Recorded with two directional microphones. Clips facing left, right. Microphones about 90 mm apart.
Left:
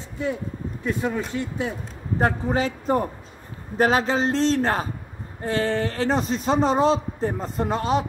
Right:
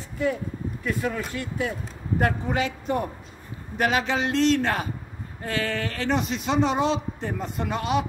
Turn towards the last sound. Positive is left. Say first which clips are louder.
# left 3 dB
turn(degrees=35)  # may be behind; listen again after turning